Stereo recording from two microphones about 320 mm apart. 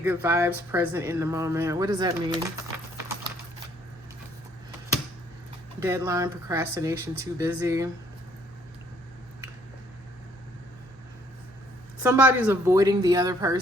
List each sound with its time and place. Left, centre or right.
0.0 s speech: centre
5.8 s speech: centre
12.0 s speech: centre